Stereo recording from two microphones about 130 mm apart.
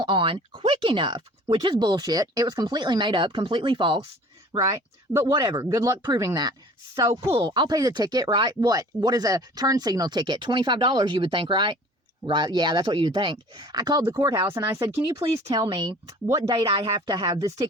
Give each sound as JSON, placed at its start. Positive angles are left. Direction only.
{"t": 0.0, "sound": "speech", "side_deg": -40}
{"t": 4.5, "sound": "speech", "side_deg": -25}
{"t": 7.1, "sound": "speech", "side_deg": -45}
{"t": 15.5, "sound": "speech", "side_deg": -30}